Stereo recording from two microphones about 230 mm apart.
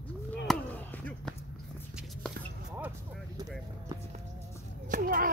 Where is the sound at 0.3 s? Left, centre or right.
Centre.